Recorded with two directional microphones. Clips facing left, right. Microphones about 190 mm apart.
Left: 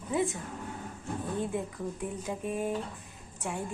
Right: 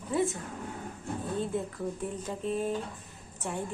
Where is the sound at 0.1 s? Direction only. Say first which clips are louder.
Right 1 dB; 15° left (ahead or behind).